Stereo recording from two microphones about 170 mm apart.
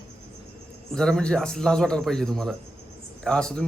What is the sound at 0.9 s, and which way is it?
Speech, 5° left (ahead or behind).